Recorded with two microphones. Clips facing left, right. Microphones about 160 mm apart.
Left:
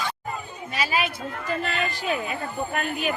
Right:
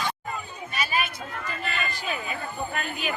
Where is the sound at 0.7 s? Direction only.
90° left.